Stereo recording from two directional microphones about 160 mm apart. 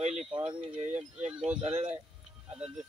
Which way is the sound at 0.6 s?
45° right (ahead or behind).